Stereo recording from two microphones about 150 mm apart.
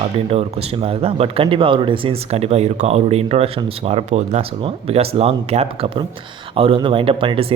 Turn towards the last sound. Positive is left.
turn(degrees=-35)  # may be behind; listen again after turning